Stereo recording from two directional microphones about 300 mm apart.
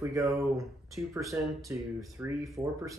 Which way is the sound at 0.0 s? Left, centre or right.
Centre.